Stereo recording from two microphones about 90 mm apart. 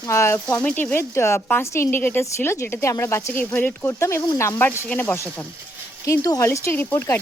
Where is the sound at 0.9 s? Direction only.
30° left (ahead or behind).